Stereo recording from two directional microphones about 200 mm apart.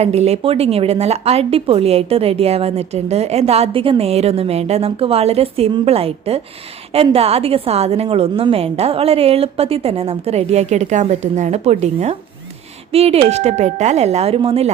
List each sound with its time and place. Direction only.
0.0 s a woman's voice: 30° right (ahead or behind)